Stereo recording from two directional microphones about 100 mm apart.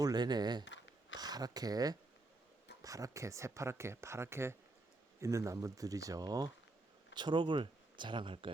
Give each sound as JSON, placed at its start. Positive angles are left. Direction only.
{"t": 0.0, "sound": "speech", "side_deg": -45}